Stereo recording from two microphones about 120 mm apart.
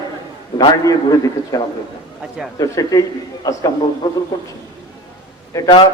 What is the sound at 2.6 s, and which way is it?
Speech, 30° left (ahead or behind).